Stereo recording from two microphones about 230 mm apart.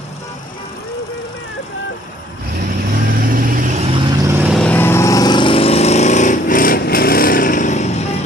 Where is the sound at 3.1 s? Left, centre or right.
Right.